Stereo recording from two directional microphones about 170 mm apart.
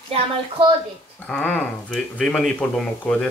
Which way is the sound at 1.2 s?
5° left (ahead or behind).